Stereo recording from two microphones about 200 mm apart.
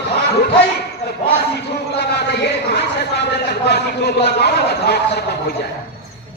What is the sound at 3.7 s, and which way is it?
Speech, 55° left (ahead or behind).